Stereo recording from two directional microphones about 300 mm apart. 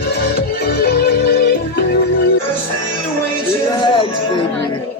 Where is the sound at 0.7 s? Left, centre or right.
Left.